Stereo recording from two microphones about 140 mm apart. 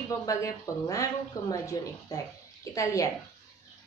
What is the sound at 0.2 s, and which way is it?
A woman's voice, 25° left (ahead or behind).